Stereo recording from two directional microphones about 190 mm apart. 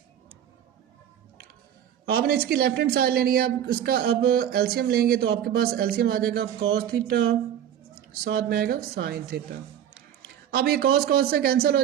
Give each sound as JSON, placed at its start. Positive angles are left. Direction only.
{"t": 2.0, "sound": "a woman's voice", "side_deg": -55}
{"t": 7.9, "sound": "a woman's voice", "side_deg": -55}